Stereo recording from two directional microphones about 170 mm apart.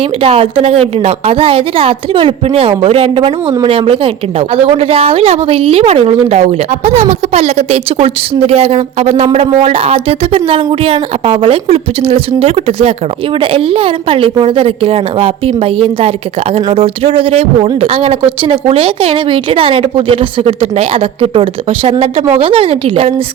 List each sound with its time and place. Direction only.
0.2 s a woman's voice: 35° right (ahead or behind)